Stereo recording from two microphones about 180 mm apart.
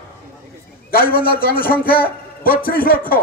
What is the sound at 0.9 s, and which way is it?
A man's voice, 55° left (ahead or behind).